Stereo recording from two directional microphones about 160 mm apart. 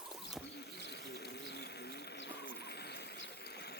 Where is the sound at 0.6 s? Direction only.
90° left.